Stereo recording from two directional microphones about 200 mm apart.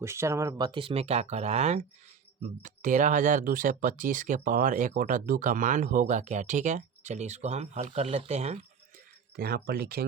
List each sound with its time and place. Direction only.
0.0 s speech: 15° right (ahead or behind); by 8.5 s 35° right (ahead or behind)
9.3 s speech: 50° right (ahead or behind)